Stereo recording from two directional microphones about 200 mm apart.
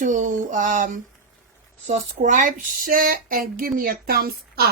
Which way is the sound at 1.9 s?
40° right (ahead or behind).